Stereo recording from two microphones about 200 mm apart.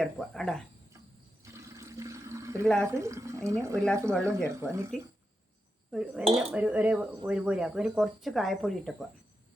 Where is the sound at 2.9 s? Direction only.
15° right (ahead or behind).